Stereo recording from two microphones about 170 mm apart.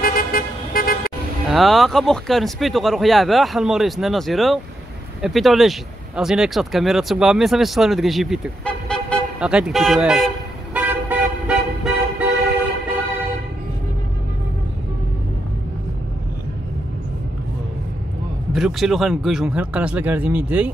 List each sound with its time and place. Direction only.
0.0 s vehicle: 55° left (ahead or behind)
1.5 s speech: centre (ahead or behind)
9.4 s toot: 5° right (ahead or behind)
18.5 s speech: centre (ahead or behind)